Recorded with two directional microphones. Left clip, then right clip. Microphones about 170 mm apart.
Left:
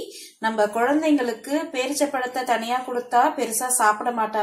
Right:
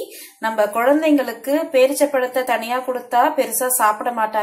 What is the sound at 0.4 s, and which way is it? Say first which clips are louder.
Speech: right 3 dB; centre (ahead or behind).